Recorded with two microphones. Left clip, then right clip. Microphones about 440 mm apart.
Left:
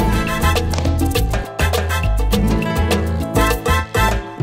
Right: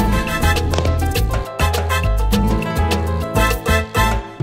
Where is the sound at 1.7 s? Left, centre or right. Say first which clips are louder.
Right 1 dB; left.